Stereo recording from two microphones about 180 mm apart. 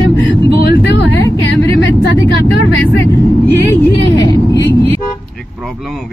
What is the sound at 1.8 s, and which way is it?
Vehicle, 90° left.